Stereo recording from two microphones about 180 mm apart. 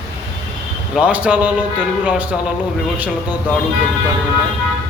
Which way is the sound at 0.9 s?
5° right (ahead or behind).